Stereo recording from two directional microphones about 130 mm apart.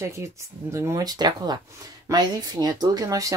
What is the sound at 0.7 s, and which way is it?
Speech, 25° right (ahead or behind).